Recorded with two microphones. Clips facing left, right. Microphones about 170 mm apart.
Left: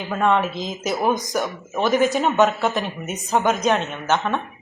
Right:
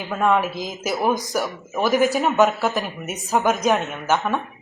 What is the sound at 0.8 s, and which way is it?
A woman's voice, centre (ahead or behind).